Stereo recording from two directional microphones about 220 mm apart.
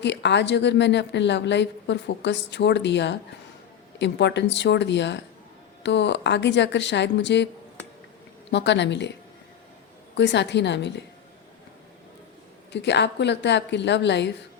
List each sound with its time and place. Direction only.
0.0 s a woman's voice: 50° left (ahead or behind)
8.4 s a woman's voice: 55° left (ahead or behind)
10.2 s a woman's voice: 50° left (ahead or behind)
12.7 s a woman's voice: 50° left (ahead or behind)